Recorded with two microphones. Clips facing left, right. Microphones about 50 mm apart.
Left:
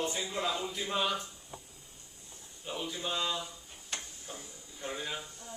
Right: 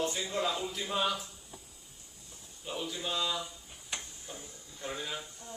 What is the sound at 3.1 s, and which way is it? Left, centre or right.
Speech, centre.